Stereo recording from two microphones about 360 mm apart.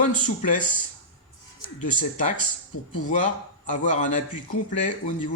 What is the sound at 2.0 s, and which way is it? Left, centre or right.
A man's voice, left.